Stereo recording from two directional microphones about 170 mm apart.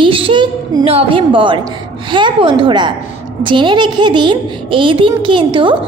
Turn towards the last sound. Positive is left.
turn(degrees=-30)  # may be behind; listen again after turning